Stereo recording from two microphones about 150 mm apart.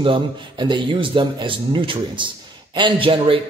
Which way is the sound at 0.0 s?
35° right (ahead or behind).